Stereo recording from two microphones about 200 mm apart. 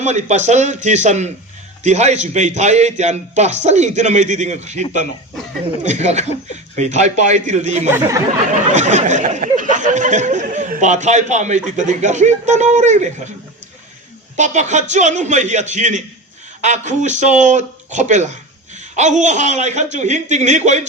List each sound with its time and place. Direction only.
0.0 s speech: 35° right (ahead or behind)
7.9 s speech: 10° right (ahead or behind)
8.7 s speech: 35° right (ahead or behind)
14.3 s speech: 35° right (ahead or behind)